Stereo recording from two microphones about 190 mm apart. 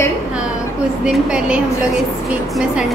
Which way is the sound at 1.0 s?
5° right (ahead or behind).